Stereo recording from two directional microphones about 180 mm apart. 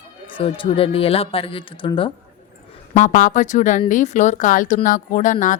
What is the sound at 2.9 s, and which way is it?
A woman's voice, 45° left (ahead or behind).